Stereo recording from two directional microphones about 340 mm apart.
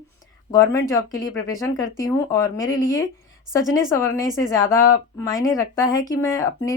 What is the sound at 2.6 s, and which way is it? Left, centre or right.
Speech, left.